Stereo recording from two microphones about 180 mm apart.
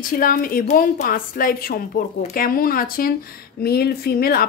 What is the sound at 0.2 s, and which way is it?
A woman's voice, 50° left (ahead or behind).